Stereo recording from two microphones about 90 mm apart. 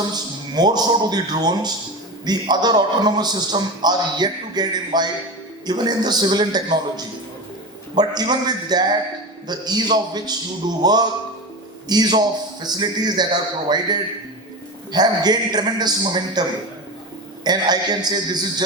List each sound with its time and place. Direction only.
0.0 s a man's voice: 50° right (ahead or behind)
17.4 s a man's voice: 50° right (ahead or behind)